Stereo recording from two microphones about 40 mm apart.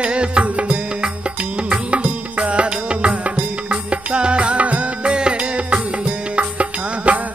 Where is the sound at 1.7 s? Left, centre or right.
Right.